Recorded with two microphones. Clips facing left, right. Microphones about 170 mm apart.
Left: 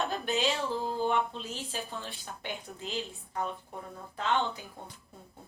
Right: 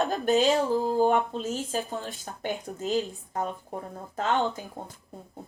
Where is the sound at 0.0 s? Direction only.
40° right (ahead or behind).